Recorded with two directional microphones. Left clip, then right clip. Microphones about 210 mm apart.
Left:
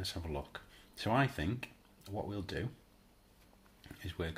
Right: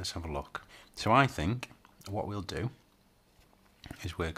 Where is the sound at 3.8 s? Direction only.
35° right (ahead or behind).